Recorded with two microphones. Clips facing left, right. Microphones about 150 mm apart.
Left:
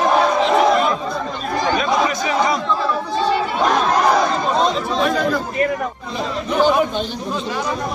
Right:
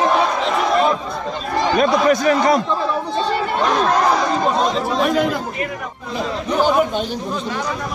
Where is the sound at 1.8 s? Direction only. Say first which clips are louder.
Right 4 dB; 50° right (ahead or behind).